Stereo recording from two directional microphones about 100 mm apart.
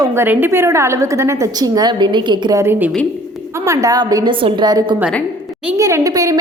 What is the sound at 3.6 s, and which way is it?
Speech, 35° right (ahead or behind).